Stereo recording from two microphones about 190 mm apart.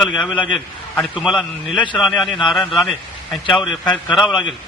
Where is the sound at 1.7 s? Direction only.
25° left (ahead or behind).